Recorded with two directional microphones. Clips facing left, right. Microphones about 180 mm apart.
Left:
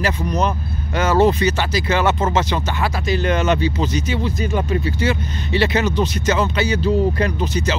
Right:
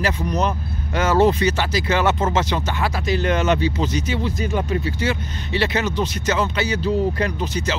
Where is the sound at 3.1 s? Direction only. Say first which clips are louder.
Left 1 dB; 30° left (ahead or behind).